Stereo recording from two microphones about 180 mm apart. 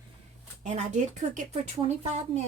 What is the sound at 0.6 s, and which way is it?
Speech, 40° right (ahead or behind).